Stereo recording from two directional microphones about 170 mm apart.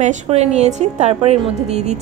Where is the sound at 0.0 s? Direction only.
45° right (ahead or behind).